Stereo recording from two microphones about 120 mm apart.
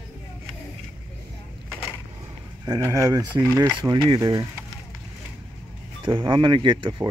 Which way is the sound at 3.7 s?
40° right (ahead or behind).